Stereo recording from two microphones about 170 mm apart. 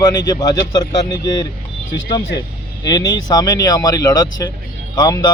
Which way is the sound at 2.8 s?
25° left (ahead or behind).